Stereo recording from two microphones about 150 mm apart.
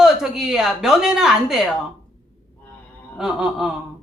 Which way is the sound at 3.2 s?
5° right (ahead or behind).